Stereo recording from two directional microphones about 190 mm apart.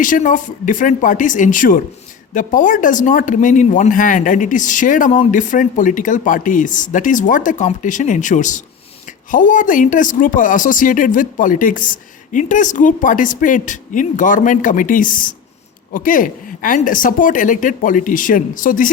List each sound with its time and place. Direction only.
0.0 s speech: 45° left (ahead or behind)